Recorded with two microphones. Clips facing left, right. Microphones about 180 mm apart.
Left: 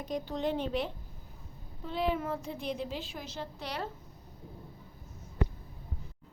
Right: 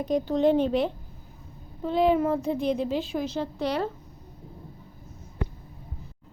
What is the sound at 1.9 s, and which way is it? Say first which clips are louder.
A woman's voice: right 10 dB; 90° right.